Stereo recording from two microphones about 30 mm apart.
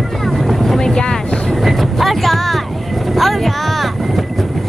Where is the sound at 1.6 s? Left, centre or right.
Centre.